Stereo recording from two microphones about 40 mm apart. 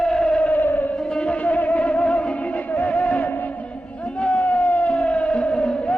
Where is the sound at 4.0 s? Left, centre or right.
Left.